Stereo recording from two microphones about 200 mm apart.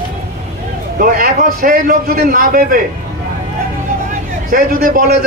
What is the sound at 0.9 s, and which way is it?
A man's voice, 50° right (ahead or behind).